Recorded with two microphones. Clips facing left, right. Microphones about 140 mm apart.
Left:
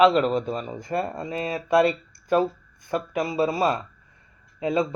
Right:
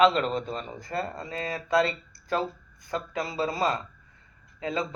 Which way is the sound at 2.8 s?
20° left (ahead or behind).